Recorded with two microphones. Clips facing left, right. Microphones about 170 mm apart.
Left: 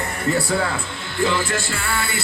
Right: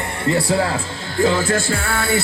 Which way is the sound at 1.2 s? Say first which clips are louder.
Right 4 dB; 40° right (ahead or behind).